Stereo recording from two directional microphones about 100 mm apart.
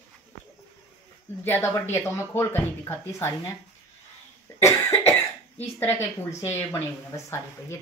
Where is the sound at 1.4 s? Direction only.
25° left (ahead or behind).